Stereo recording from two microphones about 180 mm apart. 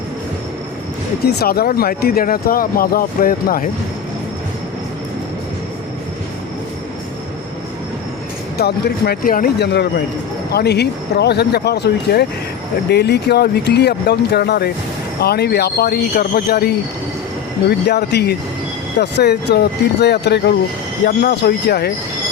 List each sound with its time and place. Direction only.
1.2 s speech: 60° left (ahead or behind)
8.5 s speech: 65° left (ahead or behind)
17.7 s speech: 70° left (ahead or behind)
21.0 s speech: 60° left (ahead or behind)